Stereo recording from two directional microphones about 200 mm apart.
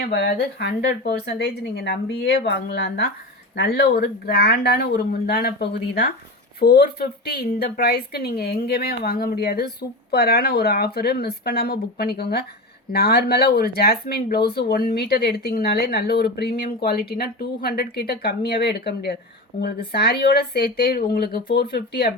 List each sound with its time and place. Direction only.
0.0 s a woman's voice: 55° left (ahead or behind)